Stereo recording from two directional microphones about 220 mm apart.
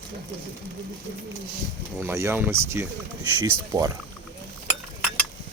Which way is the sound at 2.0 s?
10° right (ahead or behind).